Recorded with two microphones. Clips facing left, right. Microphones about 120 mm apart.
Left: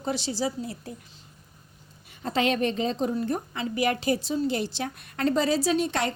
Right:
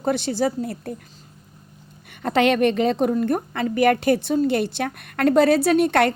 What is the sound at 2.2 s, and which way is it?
A woman's voice, 65° right (ahead or behind).